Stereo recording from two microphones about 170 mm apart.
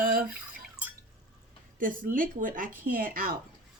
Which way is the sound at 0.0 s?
55° right (ahead or behind).